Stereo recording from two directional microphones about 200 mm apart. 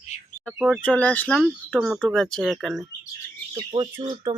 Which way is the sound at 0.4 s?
5° right (ahead or behind).